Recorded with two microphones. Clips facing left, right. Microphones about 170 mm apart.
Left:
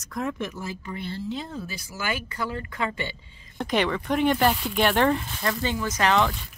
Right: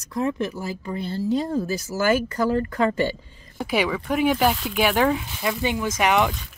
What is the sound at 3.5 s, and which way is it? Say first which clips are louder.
Speech: right 1 dB; 5° right (ahead or behind).